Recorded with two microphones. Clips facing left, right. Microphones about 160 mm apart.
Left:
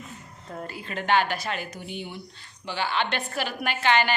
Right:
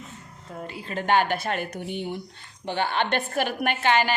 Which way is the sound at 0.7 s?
30° right (ahead or behind).